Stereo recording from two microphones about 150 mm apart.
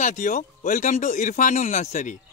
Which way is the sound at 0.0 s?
60° left (ahead or behind).